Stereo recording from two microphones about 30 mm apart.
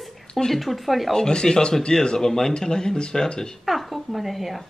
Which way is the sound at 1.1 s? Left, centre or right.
Left.